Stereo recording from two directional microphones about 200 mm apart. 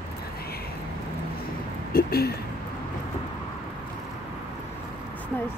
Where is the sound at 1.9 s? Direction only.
50° left (ahead or behind).